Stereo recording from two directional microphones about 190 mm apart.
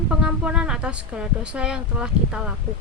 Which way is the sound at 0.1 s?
5° right (ahead or behind).